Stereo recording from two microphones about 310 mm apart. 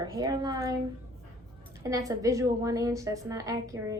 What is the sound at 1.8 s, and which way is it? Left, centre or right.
A woman's voice, centre.